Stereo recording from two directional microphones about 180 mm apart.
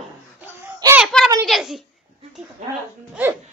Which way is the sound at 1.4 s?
Centre (ahead or behind).